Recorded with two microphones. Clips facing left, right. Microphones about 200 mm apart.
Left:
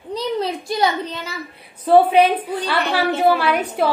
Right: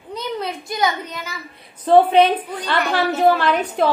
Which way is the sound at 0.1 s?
30° left (ahead or behind).